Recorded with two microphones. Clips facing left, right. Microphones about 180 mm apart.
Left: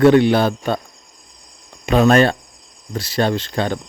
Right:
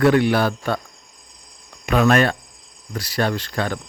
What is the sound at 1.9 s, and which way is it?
Speech, 30° left (ahead or behind).